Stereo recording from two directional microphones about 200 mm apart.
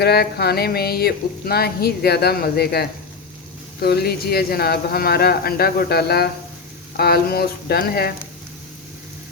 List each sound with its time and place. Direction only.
0.0 s speech: 55° left (ahead or behind)